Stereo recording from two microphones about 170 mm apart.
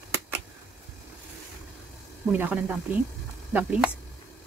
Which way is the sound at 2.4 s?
10° right (ahead or behind).